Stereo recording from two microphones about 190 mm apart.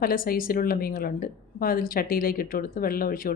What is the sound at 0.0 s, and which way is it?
A woman's voice, 50° left (ahead or behind).